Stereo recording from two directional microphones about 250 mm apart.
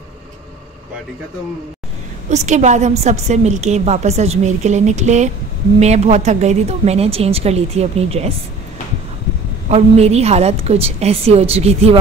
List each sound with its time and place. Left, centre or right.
2.2 s a woman's voice: right
9.7 s a woman's voice: right